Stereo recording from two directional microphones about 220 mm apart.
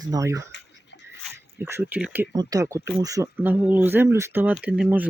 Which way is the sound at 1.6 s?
10° right (ahead or behind).